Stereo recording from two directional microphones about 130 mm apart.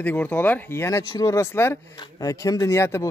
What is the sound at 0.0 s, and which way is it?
Speech, 10° left (ahead or behind).